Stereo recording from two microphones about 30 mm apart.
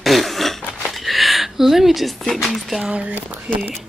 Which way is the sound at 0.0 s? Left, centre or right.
Centre.